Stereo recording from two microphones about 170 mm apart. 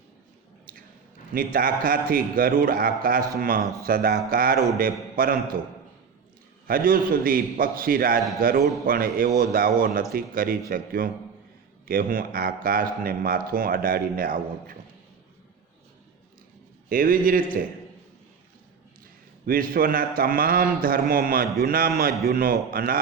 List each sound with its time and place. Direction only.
0.7 s a sound: 60° right (ahead or behind)
1.3 s a man's voice: 55° right (ahead or behind)
6.7 s a man's voice: 55° right (ahead or behind)
16.9 s a man's voice: 55° right (ahead or behind)
19.5 s a man's voice: 55° right (ahead or behind)